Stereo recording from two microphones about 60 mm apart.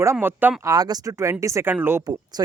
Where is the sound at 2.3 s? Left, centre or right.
Right.